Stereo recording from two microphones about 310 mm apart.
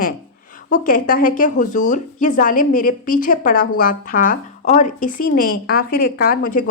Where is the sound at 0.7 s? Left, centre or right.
Left.